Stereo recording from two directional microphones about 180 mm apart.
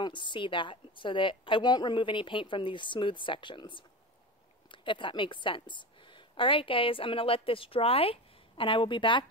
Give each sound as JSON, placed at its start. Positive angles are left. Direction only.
{"t": 0.0, "sound": "a woman's voice", "side_deg": 25}